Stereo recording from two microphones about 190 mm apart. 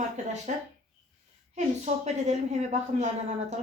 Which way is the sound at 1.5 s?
35° right (ahead or behind).